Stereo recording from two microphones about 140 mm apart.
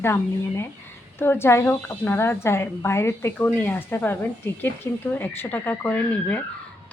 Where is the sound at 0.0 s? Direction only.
20° left (ahead or behind).